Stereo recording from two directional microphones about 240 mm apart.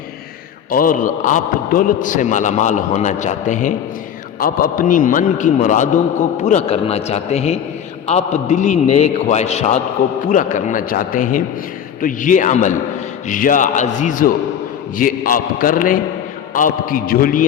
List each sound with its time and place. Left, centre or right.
0.7 s a man's voice: left